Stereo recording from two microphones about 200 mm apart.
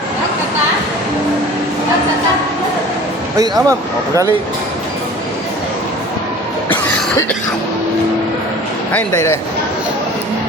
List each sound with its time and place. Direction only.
3.3 s speech: 15° right (ahead or behind)
8.9 s speech: 10° left (ahead or behind)